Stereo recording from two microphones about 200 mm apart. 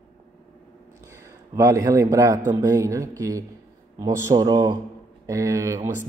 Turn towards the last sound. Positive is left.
turn(degrees=-15)  # may be behind; listen again after turning